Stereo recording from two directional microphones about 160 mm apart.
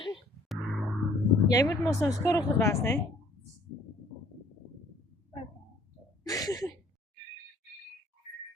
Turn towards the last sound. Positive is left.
turn(degrees=20)  # may be behind; listen again after turning